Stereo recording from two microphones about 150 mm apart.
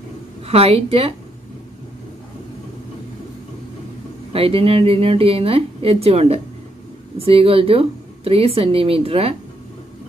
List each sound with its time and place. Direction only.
0.5 s speech: 40° right (ahead or behind)
4.3 s speech: 40° right (ahead or behind)